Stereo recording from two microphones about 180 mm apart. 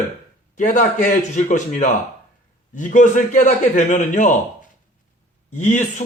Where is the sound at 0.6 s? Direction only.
45° left (ahead or behind).